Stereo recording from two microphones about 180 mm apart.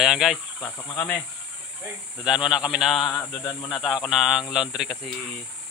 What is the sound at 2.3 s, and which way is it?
Speech, 5° right (ahead or behind).